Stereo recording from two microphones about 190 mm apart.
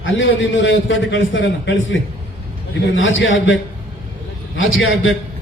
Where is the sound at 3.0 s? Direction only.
90° left.